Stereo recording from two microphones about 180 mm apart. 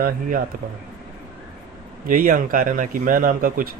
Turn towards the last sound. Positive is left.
turn(degrees=-50)  # may be behind; listen again after turning